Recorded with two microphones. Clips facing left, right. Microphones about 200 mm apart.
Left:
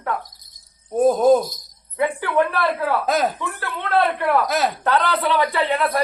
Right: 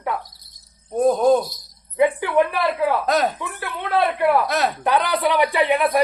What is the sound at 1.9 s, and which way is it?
A man's voice, 15° right (ahead or behind).